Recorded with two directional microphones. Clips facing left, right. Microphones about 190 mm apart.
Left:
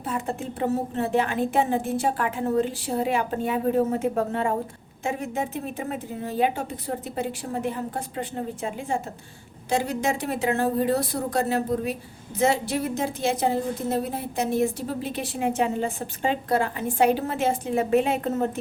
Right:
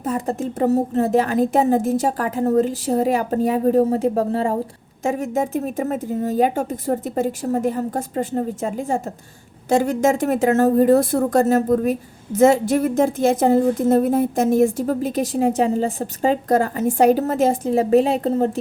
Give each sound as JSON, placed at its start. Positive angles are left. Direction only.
{"t": 0.0, "sound": "a woman's voice", "side_deg": -40}